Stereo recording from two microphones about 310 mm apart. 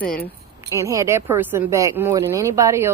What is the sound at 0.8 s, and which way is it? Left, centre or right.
Speech, centre.